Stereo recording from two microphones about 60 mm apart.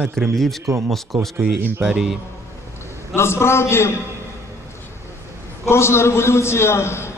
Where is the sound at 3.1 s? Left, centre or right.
Left.